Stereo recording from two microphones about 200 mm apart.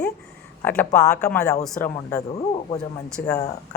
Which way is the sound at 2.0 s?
15° left (ahead or behind).